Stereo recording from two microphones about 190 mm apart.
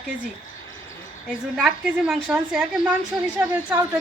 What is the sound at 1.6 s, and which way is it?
A woman's voice, 5° right (ahead or behind).